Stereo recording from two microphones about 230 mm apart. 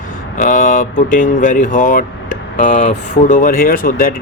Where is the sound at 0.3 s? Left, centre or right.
Left.